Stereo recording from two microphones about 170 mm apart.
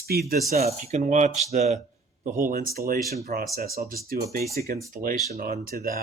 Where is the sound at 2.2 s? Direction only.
50° right (ahead or behind).